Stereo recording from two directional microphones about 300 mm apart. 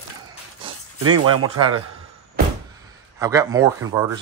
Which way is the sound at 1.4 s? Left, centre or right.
Centre.